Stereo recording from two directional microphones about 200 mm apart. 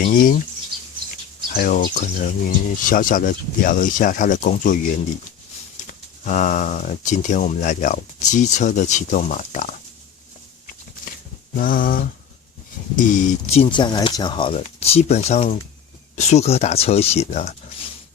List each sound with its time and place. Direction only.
0.0 s speech: 45° left (ahead or behind)
1.5 s speech: 45° left (ahead or behind)
11.5 s speech: 45° left (ahead or behind)